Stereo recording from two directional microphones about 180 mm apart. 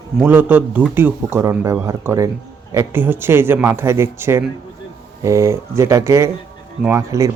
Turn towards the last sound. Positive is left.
turn(degrees=-15)  # may be behind; listen again after turning